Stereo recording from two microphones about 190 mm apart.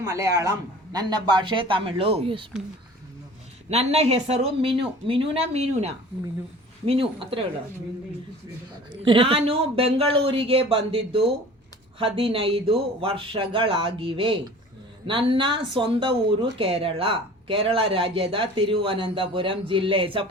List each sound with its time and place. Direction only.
0.1 s a man's voice: 15° right (ahead or behind)
3.7 s speech: 35° right (ahead or behind)
8.9 s speech: 25° right (ahead or behind)